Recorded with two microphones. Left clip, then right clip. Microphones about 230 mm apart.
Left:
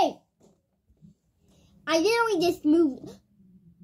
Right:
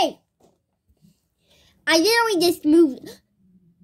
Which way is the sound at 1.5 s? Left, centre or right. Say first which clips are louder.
Right 6 dB; right.